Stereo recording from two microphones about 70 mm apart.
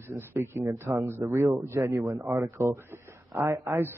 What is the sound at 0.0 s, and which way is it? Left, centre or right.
A man's voice, right.